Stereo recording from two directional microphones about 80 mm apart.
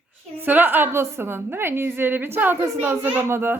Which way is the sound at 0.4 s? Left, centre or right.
Right.